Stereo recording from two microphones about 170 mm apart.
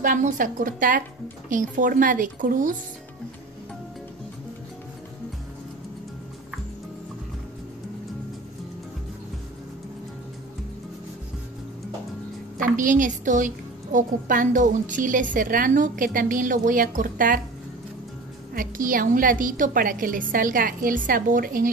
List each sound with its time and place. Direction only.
0.0 s a woman's voice: 50° right (ahead or behind)
12.6 s a woman's voice: 50° right (ahead or behind)
18.5 s a woman's voice: 55° right (ahead or behind)